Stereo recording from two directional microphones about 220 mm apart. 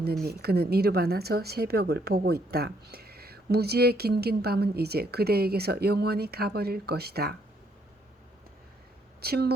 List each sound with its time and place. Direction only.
0.3 s speech: 45° right (ahead or behind)
9.2 s speech: 45° right (ahead or behind)